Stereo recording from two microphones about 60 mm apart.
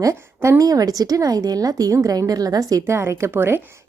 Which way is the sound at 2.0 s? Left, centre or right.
Right.